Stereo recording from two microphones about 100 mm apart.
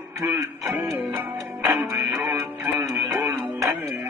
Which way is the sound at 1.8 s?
30° right (ahead or behind).